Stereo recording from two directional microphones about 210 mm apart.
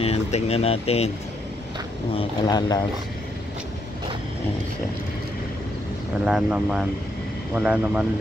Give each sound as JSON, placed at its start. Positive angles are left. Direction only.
{"t": 0.0, "sound": "speech", "side_deg": 30}
{"t": 2.1, "sound": "speech", "side_deg": 20}
{"t": 6.2, "sound": "speech", "side_deg": -5}